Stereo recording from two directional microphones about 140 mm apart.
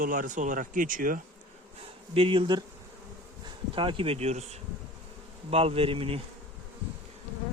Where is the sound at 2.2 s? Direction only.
35° right (ahead or behind).